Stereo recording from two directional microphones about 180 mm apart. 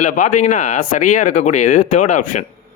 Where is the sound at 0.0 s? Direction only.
45° left (ahead or behind).